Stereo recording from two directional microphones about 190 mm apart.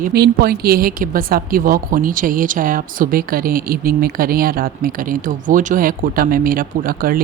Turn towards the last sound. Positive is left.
turn(degrees=-50)  # may be behind; listen again after turning